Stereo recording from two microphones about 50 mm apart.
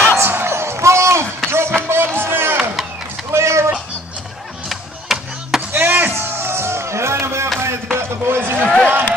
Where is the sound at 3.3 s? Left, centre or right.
Right.